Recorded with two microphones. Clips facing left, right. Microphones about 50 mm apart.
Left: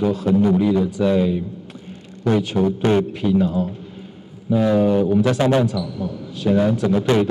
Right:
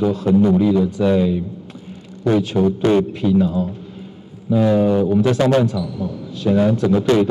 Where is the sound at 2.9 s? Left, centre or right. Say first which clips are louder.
Right 2 dB; centre.